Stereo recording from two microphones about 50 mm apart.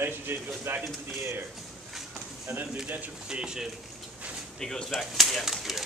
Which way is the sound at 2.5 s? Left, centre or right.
Right.